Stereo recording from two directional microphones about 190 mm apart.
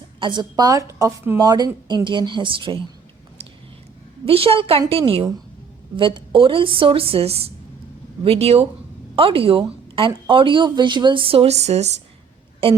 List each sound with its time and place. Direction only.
0.2 s a woman's voice: 25° right (ahead or behind)
4.3 s a woman's voice: 30° right (ahead or behind)